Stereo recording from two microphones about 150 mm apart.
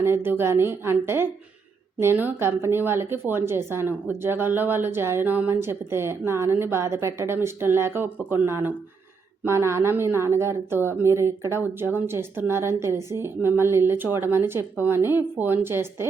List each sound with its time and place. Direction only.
0.0 s a woman's voice: 15° right (ahead or behind)